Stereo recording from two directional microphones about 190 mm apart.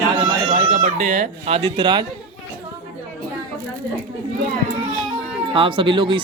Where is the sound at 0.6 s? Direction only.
40° right (ahead or behind).